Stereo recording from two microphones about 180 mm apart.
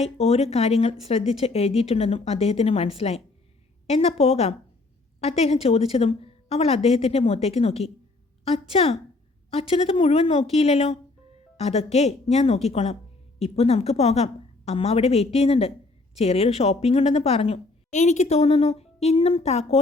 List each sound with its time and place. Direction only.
0.0 s a woman's voice: 35° left (ahead or behind)